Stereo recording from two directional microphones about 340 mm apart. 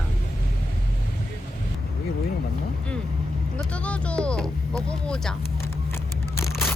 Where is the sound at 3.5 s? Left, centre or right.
Centre.